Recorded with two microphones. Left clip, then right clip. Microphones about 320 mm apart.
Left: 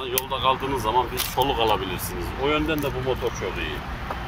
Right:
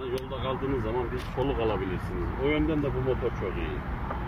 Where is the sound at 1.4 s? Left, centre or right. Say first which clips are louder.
Left 6 dB; left.